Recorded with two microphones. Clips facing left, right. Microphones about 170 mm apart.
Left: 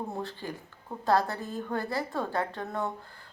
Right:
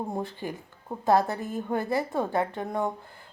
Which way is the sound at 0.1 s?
15° right (ahead or behind).